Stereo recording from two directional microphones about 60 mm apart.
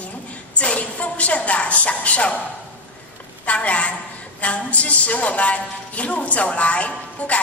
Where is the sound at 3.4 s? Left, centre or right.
Left.